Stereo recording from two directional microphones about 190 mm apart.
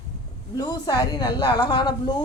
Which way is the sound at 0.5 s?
20° left (ahead or behind).